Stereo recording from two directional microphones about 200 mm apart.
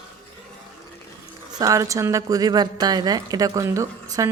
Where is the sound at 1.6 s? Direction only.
15° right (ahead or behind).